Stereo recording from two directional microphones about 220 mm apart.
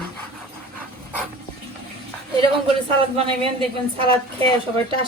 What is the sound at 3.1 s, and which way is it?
Speech, 25° right (ahead or behind).